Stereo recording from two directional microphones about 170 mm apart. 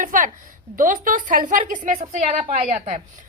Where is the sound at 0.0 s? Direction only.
50° right (ahead or behind).